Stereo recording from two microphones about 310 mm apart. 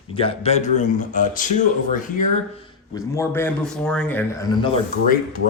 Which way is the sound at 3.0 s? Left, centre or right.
Centre.